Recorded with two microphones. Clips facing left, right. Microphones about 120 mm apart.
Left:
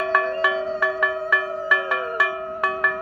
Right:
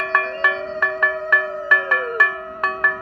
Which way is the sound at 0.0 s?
10° left (ahead or behind).